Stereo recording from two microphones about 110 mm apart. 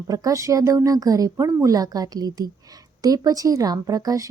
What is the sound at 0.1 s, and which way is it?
A woman's voice, 30° right (ahead or behind).